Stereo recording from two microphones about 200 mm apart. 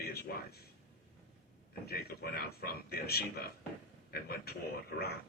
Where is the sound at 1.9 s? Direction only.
50° left (ahead or behind).